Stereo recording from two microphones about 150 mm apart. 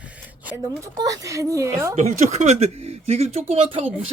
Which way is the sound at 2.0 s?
50° right (ahead or behind).